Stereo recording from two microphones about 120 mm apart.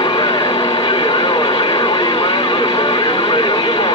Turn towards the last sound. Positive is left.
turn(degrees=45)  # may be behind; listen again after turning